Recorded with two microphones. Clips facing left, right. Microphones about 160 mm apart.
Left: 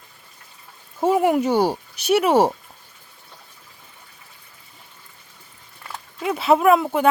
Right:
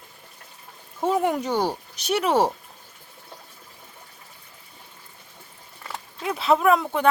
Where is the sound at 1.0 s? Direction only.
5° left (ahead or behind).